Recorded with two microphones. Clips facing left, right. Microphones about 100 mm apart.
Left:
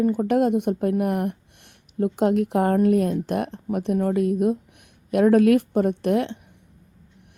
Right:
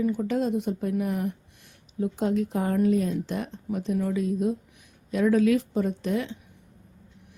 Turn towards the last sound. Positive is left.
turn(degrees=60)  # may be behind; listen again after turning